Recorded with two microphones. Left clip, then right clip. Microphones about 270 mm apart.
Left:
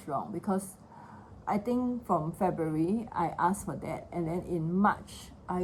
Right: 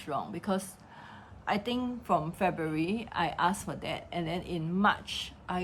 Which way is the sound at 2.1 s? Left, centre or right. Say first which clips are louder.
Right 2 dB; right.